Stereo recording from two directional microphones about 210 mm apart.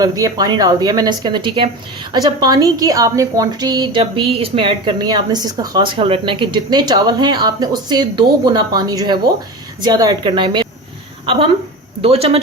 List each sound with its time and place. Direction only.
0.0 s a woman's voice: 15° right (ahead or behind)
12.0 s a woman's voice: 30° right (ahead or behind)